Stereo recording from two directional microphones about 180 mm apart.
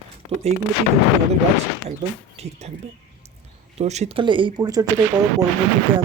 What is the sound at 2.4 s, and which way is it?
Speech, 35° right (ahead or behind).